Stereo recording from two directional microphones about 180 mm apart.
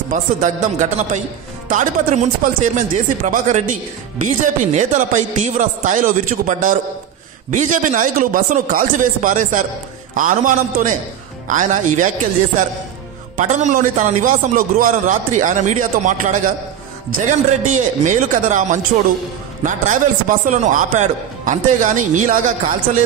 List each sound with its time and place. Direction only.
0.1 s a man's voice: 45° right (ahead or behind)
13.4 s a man's voice: 45° right (ahead or behind)
17.6 s a man's voice: 45° right (ahead or behind)